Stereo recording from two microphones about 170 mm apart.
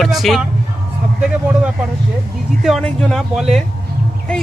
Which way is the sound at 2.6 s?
Centre (ahead or behind).